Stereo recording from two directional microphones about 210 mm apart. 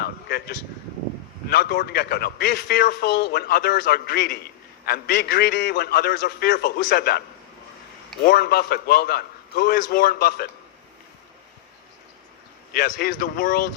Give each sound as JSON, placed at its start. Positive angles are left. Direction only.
{"t": 0.0, "sound": "a sound", "side_deg": 45}
{"t": 1.5, "sound": "a man's voice", "side_deg": 50}
{"t": 8.2, "sound": "a man's voice", "side_deg": 45}
{"t": 12.7, "sound": "a man's voice", "side_deg": 45}